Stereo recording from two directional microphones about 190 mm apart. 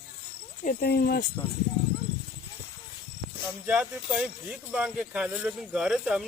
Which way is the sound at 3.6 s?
5° right (ahead or behind).